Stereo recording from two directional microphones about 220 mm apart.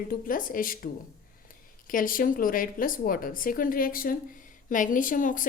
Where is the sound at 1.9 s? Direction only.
40° left (ahead or behind).